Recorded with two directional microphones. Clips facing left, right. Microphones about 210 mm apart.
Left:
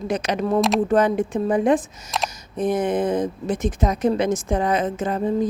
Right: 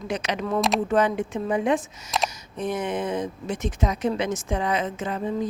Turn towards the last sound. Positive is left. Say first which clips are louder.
# left 5 dB
turn(degrees=50)  # may be behind; listen again after turning